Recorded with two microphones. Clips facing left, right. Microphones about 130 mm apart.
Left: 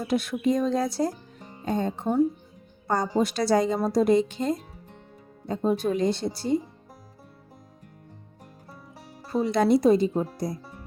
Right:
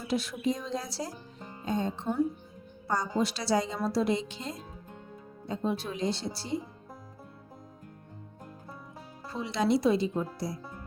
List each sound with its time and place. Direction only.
0.0 s speech: 55° left (ahead or behind)
9.3 s speech: 45° left (ahead or behind)